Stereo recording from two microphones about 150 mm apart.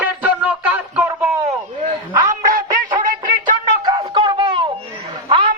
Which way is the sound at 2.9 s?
30° right (ahead or behind).